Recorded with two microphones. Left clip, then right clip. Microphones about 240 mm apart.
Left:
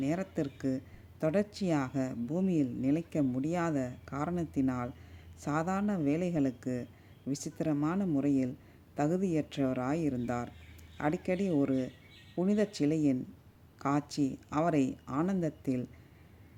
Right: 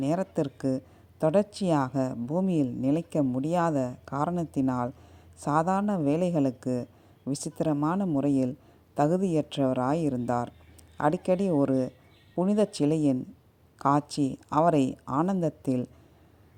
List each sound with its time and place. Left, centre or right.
0.0 s a woman's voice: centre